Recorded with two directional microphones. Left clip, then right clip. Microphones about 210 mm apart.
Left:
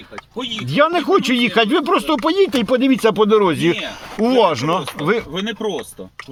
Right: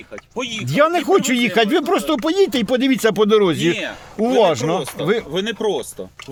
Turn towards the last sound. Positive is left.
turn(degrees=-20)  # may be behind; listen again after turning